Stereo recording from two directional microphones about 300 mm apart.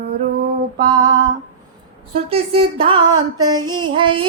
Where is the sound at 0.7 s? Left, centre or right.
Centre.